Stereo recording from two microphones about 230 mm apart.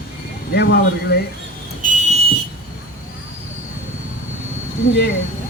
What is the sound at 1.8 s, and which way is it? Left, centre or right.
Fire alarm, right.